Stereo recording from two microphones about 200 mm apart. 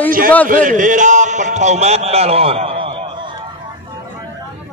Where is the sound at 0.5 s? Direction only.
40° right (ahead or behind).